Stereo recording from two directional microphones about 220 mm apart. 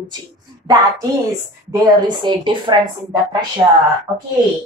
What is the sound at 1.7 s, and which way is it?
A woman's voice, 20° right (ahead or behind).